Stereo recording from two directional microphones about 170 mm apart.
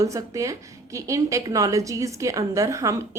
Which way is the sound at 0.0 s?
20° right (ahead or behind).